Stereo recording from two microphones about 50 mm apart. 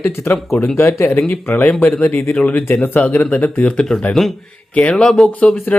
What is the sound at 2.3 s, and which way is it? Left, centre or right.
Speech, left.